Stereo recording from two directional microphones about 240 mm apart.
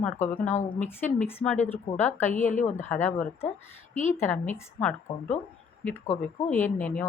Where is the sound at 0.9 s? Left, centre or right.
Centre.